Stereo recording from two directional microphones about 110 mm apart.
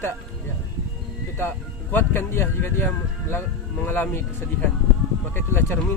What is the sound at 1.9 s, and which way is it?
Speech, 20° left (ahead or behind).